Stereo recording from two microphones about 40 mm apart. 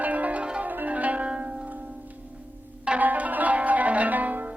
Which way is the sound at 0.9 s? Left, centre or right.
Right.